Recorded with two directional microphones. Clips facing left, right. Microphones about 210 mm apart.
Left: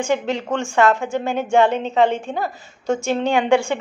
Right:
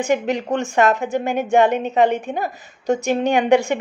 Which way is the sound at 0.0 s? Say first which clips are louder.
Right 1 dB; 15° right (ahead or behind).